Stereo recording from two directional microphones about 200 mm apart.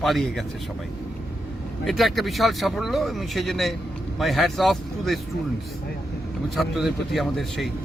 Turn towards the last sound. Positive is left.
turn(degrees=0)  # may be behind; listen again after turning